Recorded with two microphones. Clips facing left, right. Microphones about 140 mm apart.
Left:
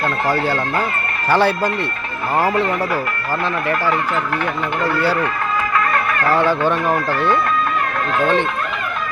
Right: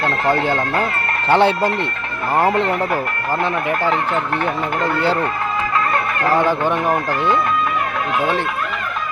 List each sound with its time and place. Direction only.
0.3 s speech: 20° right (ahead or behind)
3.7 s speech: 20° right (ahead or behind)
6.2 s speech: 15° right (ahead or behind)